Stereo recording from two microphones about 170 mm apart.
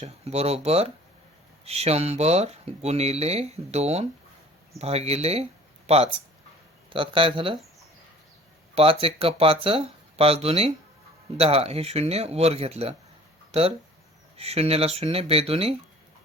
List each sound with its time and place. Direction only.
0.0 s speech: 40° right (ahead or behind)
8.7 s speech: 35° right (ahead or behind)